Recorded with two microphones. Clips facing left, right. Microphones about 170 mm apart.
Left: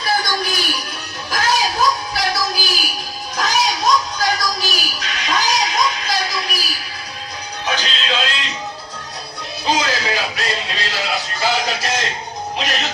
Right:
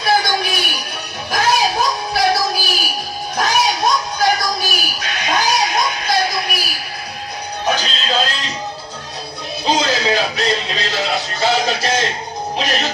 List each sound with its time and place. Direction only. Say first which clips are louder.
0.0 s a sound: right 4 dB; 60° right (ahead or behind)
1.3 s music: right 3 dB; 60° right (ahead or behind)
7.6 s music: right 3 dB; 45° right (ahead or behind)
9.6 s music: right 3 dB; 25° right (ahead or behind)
11.8 s music: right 4 dB; centre (ahead or behind)